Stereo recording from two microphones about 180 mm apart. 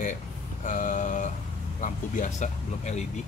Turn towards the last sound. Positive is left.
turn(degrees=40)  # may be behind; listen again after turning